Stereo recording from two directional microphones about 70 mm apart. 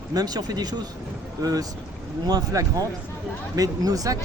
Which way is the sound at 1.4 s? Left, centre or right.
Right.